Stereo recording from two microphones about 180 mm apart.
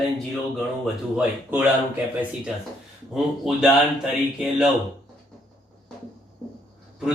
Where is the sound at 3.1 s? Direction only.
Centre (ahead or behind).